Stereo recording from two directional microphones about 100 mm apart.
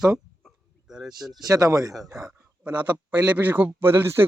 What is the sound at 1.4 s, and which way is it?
A man's voice, 35° right (ahead or behind).